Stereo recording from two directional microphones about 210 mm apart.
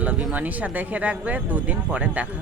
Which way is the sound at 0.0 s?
5° right (ahead or behind).